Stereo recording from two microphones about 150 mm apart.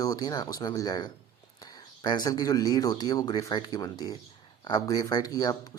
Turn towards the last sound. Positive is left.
turn(degrees=25)  # may be behind; listen again after turning